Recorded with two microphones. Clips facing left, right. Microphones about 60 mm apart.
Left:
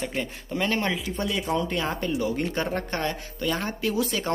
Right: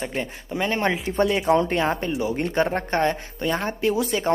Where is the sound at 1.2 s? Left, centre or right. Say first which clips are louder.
Right 9 dB; right.